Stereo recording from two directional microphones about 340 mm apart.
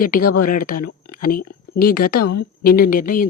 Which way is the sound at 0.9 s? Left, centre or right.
Left.